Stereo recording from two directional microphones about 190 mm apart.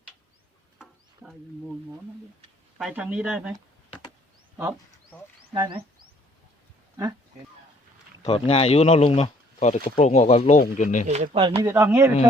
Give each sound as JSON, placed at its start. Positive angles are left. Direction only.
{"t": 0.8, "sound": "a sound", "side_deg": 0}
{"t": 2.7, "sound": "speech", "side_deg": -5}
{"t": 5.5, "sound": "speech", "side_deg": -25}
{"t": 8.2, "sound": "speech", "side_deg": 30}
{"t": 11.1, "sound": "speech", "side_deg": -40}
{"t": 11.3, "sound": "speech", "side_deg": -25}
{"t": 11.6, "sound": "speech", "side_deg": -15}